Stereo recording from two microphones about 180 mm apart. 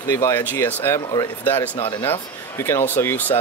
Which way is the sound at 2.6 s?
15° left (ahead or behind).